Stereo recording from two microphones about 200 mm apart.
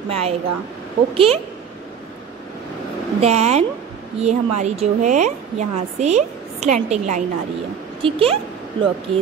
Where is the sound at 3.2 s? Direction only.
35° right (ahead or behind).